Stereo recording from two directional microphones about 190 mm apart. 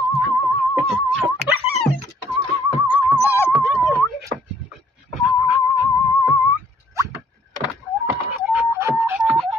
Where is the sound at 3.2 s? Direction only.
10° right (ahead or behind).